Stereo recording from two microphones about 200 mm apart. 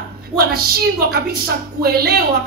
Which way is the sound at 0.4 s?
50° right (ahead or behind).